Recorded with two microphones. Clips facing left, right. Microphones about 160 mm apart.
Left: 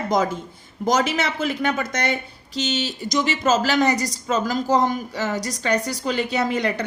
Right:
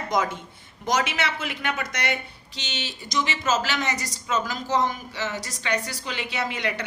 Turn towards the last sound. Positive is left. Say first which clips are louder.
# left 6 dB
turn(degrees=40)  # may be behind; listen again after turning